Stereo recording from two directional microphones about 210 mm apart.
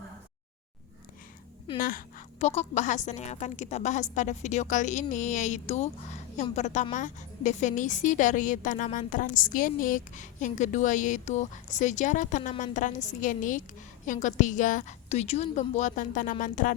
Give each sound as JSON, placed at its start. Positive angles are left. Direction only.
{"t": 1.8, "sound": "a woman's voice", "side_deg": 45}